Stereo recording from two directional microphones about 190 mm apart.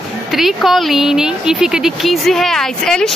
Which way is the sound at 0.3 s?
Centre (ahead or behind).